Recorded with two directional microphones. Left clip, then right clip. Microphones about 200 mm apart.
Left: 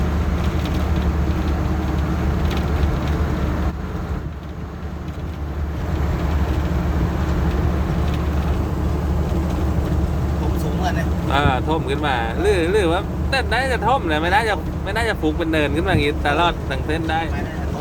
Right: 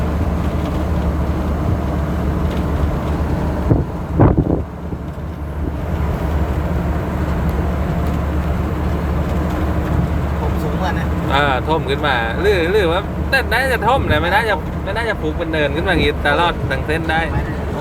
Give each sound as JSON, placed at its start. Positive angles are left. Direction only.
{"t": 11.3, "sound": "speech", "side_deg": -5}